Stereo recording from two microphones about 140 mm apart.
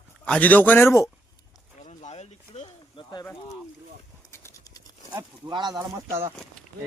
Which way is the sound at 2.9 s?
30° left (ahead or behind).